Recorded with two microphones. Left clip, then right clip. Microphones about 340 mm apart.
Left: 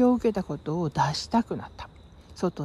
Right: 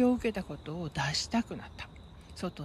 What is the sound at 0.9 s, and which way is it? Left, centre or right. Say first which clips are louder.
Speech: left 6 dB; centre.